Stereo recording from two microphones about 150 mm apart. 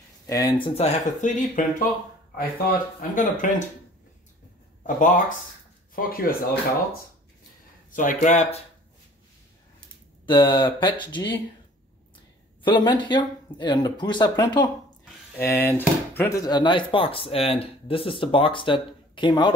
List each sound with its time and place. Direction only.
0.3 s speech: 25° left (ahead or behind)
0.6 s speech: 45° left (ahead or behind); by 1.9 s 60° left (ahead or behind)
2.3 s speech: 70° left (ahead or behind)
4.8 s speech: 60° left (ahead or behind)
5.9 s speech: 75° left (ahead or behind)
7.9 s speech: 60° left (ahead or behind)
10.2 s speech: 30° left (ahead or behind)
12.6 s speech: 30° left (ahead or behind)
15.3 s speech: 15° left (ahead or behind); by 19.5 s 30° left (ahead or behind)